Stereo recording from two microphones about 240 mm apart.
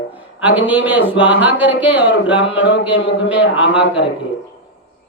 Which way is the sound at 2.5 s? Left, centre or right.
Left.